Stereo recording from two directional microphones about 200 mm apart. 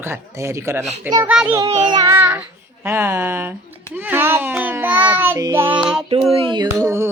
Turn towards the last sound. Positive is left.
turn(degrees=-15)  # may be behind; listen again after turning